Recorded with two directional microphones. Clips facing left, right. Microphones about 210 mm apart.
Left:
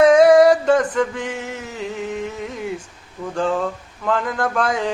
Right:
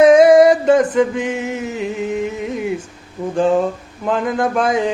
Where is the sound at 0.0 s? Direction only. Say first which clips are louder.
Right 3 dB; 20° right (ahead or behind).